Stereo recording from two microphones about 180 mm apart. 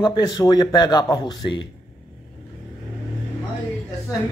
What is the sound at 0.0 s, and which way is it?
A man's voice, 20° left (ahead or behind).